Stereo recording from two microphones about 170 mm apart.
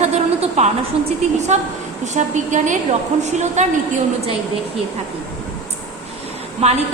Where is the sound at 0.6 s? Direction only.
40° right (ahead or behind).